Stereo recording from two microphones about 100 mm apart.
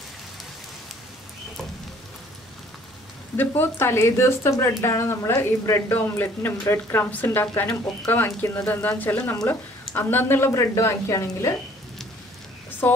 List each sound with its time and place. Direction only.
3.3 s speech: 20° left (ahead or behind)